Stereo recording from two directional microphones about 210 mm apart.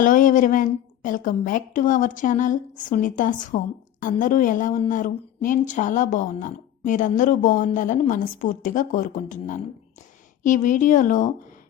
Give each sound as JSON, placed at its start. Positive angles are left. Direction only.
{"t": 0.0, "sound": "a woman's voice", "side_deg": 40}